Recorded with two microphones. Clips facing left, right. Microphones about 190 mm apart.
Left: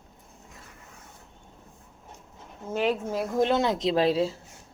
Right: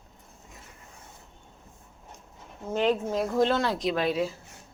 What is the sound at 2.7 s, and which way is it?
Speech, 10° left (ahead or behind).